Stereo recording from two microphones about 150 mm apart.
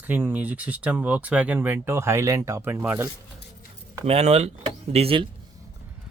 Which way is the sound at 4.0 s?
45° right (ahead or behind).